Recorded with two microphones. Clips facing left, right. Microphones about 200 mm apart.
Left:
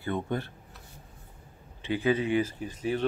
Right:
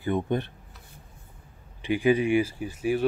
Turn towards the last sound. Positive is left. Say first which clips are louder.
# right 4 dB
turn(degrees=-10)  # may be behind; listen again after turning